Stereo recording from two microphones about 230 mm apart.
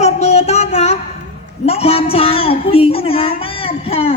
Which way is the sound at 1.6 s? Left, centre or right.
Left.